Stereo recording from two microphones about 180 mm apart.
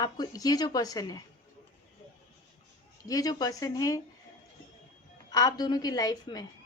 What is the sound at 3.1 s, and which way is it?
Speech, 20° left (ahead or behind).